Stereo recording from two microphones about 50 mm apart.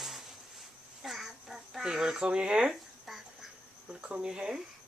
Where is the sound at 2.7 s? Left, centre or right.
Centre.